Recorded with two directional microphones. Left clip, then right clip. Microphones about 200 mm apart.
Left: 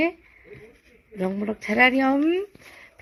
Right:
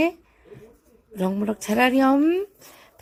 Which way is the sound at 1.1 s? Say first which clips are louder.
Right 2 dB; 20° right (ahead or behind).